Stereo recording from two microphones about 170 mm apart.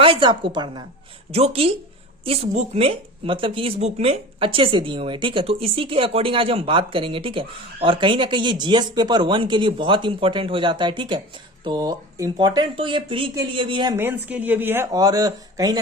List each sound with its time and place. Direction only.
0.0 s speech: 30° right (ahead or behind)
13.9 s speech: 10° right (ahead or behind)
14.9 s speech: 20° right (ahead or behind)